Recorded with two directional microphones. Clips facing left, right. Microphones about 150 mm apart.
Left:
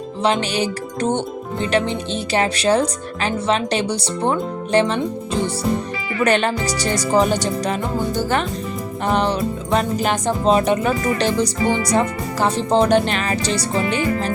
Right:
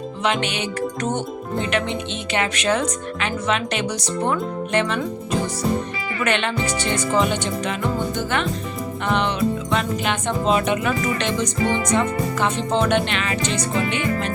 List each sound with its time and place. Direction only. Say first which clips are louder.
0.2 s music: left 4 dB; 30° left (ahead or behind)